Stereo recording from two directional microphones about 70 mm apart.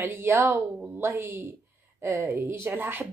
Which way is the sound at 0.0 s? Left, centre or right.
Right.